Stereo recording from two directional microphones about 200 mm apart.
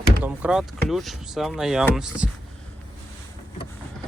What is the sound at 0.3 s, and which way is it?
Speech, 5° right (ahead or behind).